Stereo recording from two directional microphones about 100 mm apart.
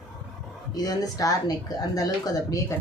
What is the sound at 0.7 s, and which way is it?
Speech, 40° left (ahead or behind).